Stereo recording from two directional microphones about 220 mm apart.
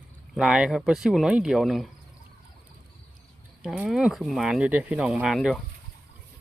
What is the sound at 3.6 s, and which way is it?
Speech, 5° right (ahead or behind).